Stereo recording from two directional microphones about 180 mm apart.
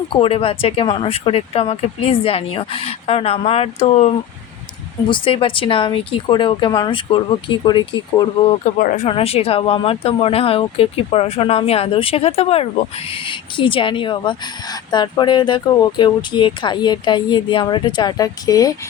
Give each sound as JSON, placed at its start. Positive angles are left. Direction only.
{"t": 0.1, "sound": "speech", "side_deg": 30}
{"t": 8.6, "sound": "speech", "side_deg": 45}
{"t": 9.0, "sound": "speech", "side_deg": 35}